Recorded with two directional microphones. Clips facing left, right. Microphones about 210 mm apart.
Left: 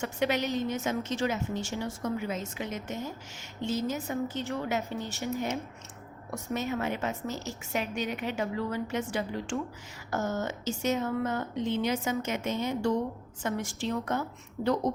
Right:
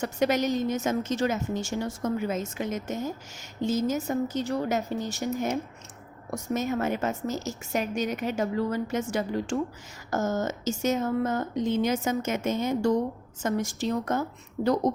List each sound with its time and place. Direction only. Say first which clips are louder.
0.0 s a woman's voice: right 4 dB; 40° right (ahead or behind)
6.3 s a woman's voice: right 4 dB; 45° right (ahead or behind)